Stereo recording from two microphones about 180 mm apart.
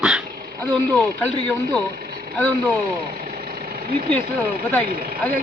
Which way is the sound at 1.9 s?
60° right (ahead or behind).